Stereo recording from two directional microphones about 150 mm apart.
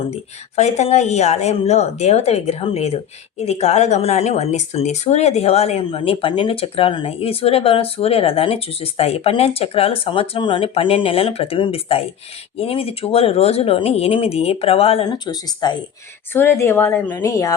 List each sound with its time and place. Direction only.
0.5 s speech: 50° left (ahead or behind); by 15.8 s 25° left (ahead or behind)
16.3 s a woman's voice: 15° left (ahead or behind)